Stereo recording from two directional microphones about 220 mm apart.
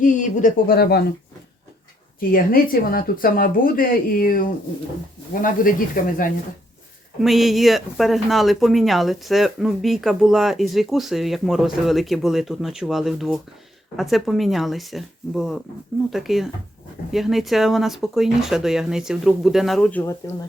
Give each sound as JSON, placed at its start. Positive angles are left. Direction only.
{"t": 0.0, "sound": "speech", "side_deg": 35}
{"t": 2.3, "sound": "speech", "side_deg": 40}
{"t": 7.2, "sound": "speech", "side_deg": 0}